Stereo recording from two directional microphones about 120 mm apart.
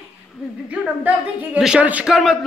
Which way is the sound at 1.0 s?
10° right (ahead or behind).